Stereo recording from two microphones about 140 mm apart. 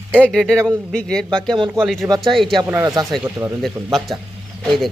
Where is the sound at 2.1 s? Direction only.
30° right (ahead or behind).